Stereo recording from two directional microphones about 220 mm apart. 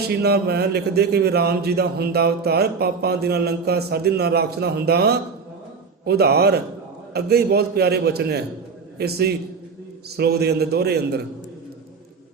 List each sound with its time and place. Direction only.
0.2 s a man's voice: 45° right (ahead or behind)